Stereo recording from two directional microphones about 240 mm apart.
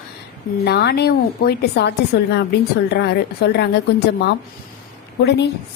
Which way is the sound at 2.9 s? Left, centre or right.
Left.